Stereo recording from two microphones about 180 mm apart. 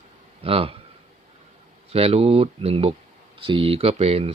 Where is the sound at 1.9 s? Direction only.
35° right (ahead or behind).